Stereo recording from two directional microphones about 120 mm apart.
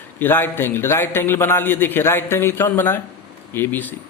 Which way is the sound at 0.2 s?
15° left (ahead or behind).